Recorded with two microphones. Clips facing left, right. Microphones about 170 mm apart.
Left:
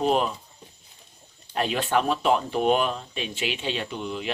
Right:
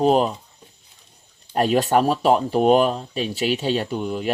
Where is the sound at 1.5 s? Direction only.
45° right (ahead or behind).